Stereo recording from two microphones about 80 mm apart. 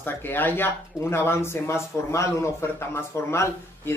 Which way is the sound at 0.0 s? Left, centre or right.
Left.